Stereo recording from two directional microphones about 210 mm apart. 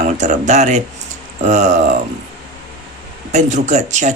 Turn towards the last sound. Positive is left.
turn(degrees=-35)  # may be behind; listen again after turning